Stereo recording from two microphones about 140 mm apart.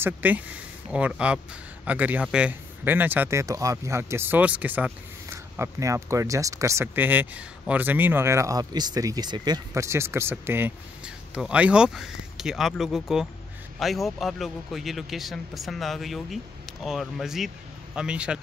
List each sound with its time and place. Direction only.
0.0 s speech: 10° right (ahead or behind)